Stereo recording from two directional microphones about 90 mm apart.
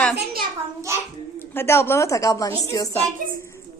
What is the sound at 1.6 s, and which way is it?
A woman's voice, 25° left (ahead or behind).